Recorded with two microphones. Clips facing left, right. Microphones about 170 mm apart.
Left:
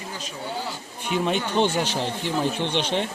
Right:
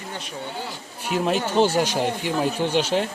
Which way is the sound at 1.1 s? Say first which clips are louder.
Right 2 dB; 5° right (ahead or behind).